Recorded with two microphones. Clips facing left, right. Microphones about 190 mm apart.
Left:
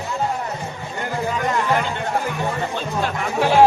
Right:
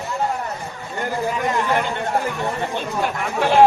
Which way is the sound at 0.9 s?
Centre (ahead or behind).